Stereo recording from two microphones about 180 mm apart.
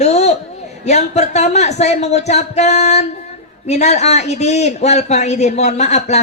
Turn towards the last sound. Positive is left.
turn(degrees=40)  # may be behind; listen again after turning